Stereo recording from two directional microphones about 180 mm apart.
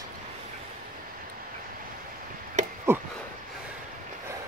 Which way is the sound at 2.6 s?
40° right (ahead or behind).